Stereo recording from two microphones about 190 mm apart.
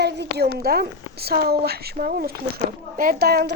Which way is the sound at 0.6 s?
55° right (ahead or behind).